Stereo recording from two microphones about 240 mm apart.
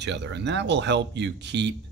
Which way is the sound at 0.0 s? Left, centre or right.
Right.